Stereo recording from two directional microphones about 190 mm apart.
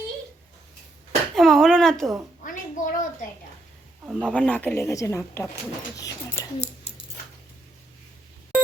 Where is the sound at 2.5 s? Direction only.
45° left (ahead or behind).